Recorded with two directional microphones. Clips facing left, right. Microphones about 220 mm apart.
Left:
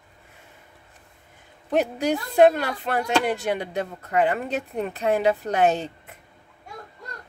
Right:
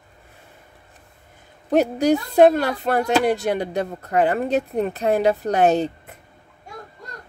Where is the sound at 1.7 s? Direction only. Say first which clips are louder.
Right 5 dB; 40° right (ahead or behind).